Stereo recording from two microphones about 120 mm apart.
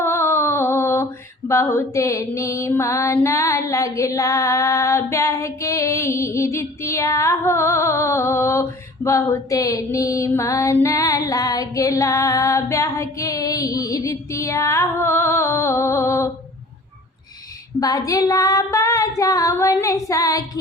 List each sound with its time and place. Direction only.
0.0 s a sound: 20° left (ahead or behind)
1.5 s music: 25° left (ahead or behind)
10.8 s female singing: 25° left (ahead or behind)
17.7 s music: 30° left (ahead or behind)